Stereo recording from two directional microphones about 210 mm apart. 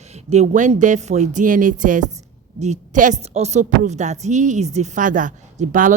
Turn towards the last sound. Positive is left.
turn(degrees=-40)  # may be behind; listen again after turning